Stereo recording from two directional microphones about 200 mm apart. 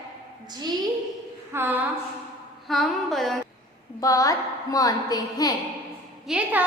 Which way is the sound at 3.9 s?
15° left (ahead or behind).